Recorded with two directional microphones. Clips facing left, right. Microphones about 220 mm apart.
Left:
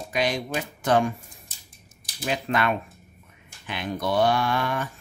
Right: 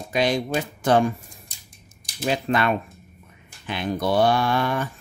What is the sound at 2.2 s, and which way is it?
Speech, 30° right (ahead or behind).